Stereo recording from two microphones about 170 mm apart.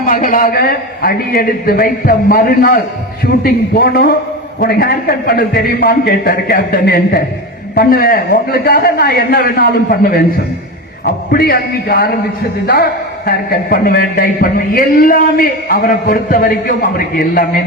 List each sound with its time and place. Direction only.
0.0 s a man's voice: 55° left (ahead or behind)